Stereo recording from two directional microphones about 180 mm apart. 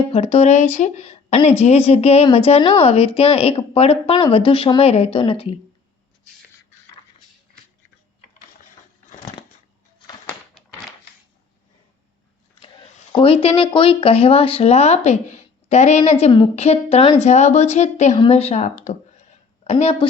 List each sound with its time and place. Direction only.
0.1 s speech: 35° left (ahead or behind)
10.2 s a sound: 5° left (ahead or behind)
13.1 s speech: 30° left (ahead or behind)